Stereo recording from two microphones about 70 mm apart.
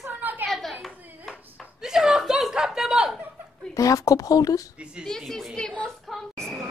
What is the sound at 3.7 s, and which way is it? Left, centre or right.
Speech, left.